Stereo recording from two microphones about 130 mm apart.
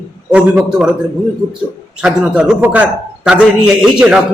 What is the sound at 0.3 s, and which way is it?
Speech, 10° right (ahead or behind).